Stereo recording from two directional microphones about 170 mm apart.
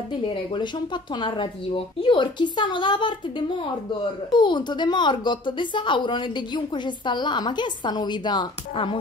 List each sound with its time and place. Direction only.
1.1 s speech: 30° left (ahead or behind)